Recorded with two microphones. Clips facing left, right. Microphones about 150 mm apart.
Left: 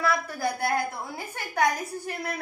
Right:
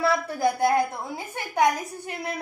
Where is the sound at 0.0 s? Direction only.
25° right (ahead or behind).